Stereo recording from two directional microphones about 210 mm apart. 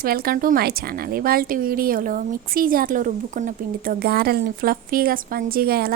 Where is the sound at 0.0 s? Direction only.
45° right (ahead or behind).